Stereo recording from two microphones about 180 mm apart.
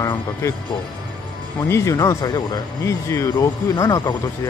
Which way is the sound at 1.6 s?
15° left (ahead or behind).